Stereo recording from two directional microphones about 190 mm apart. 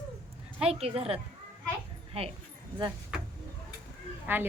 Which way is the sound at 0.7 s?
30° right (ahead or behind).